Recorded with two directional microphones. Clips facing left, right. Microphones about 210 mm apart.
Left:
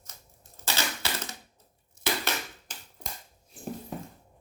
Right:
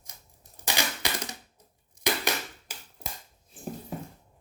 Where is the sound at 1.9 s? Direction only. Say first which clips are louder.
Right 2 dB; 15° right (ahead or behind).